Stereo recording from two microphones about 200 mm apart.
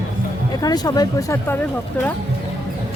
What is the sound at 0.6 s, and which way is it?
Speech, 20° left (ahead or behind).